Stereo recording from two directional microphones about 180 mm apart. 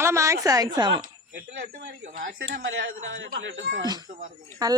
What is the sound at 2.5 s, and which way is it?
A man's voice, 80° right.